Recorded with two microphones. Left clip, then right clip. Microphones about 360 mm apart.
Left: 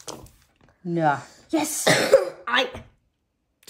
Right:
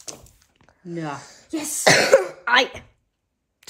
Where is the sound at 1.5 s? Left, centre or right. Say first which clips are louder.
Left 4 dB; left.